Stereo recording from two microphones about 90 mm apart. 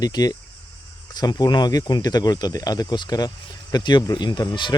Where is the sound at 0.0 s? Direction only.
45° left (ahead or behind).